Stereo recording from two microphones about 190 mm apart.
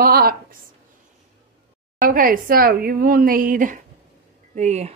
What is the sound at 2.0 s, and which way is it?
Speech, 45° right (ahead or behind).